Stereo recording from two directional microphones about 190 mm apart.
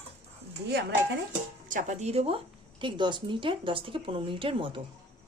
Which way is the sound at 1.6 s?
40° right (ahead or behind).